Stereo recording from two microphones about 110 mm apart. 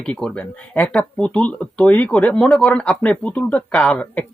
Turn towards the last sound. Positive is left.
turn(degrees=15)  # may be behind; listen again after turning